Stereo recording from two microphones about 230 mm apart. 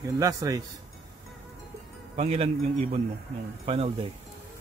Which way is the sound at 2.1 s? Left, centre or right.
Right.